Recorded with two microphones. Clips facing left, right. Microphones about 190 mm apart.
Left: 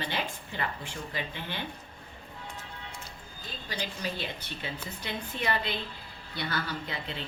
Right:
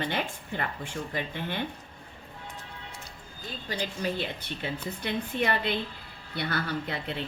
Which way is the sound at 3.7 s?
50° right (ahead or behind).